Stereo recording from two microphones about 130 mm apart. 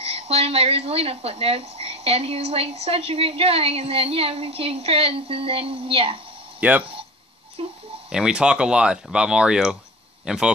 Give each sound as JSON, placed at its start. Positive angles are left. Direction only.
{"t": 0.0, "sound": "speech", "side_deg": -50}
{"t": 6.8, "sound": "a sound", "side_deg": -45}
{"t": 8.1, "sound": "a man's voice", "side_deg": -5}